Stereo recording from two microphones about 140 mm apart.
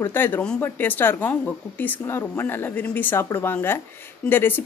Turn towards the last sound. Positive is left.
turn(degrees=15)  # may be behind; listen again after turning